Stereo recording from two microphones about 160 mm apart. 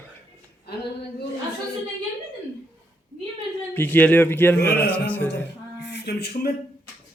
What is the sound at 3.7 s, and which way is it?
A man's voice, 10° left (ahead or behind).